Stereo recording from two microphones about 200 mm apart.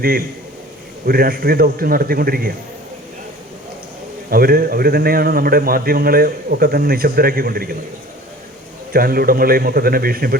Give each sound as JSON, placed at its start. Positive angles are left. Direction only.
{"t": 1.0, "sound": "a man's voice", "side_deg": -50}
{"t": 4.3, "sound": "a man's voice", "side_deg": -50}
{"t": 8.9, "sound": "a man's voice", "side_deg": -50}